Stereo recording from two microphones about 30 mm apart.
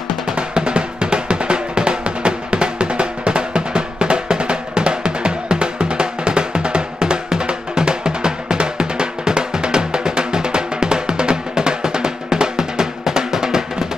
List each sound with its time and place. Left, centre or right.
0.4 s drum: right